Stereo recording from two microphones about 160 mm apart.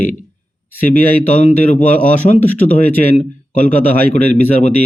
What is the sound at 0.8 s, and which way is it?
Speech, 55° left (ahead or behind).